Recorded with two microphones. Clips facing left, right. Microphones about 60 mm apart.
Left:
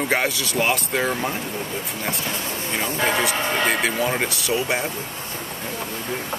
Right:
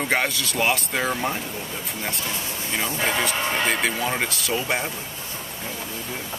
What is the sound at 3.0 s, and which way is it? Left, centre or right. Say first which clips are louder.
Speech: left 3 dB; centre.